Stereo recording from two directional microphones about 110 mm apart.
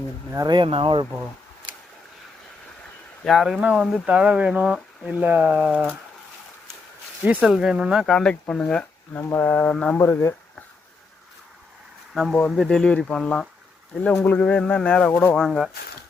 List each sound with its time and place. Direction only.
0.3 s speech: 40° right (ahead or behind)
3.2 s speech: centre (ahead or behind)
7.4 s speech: 5° right (ahead or behind)
8.0 s speech: 5° left (ahead or behind)
10.0 s speech: 20° left (ahead or behind)
12.3 s speech: 5° left (ahead or behind)
15.4 s speech: 5° right (ahead or behind)